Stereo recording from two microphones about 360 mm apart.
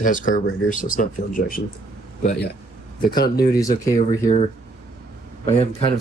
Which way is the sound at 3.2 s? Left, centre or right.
Left.